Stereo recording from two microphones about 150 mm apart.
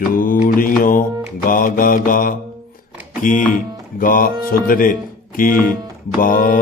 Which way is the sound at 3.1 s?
60° left (ahead or behind).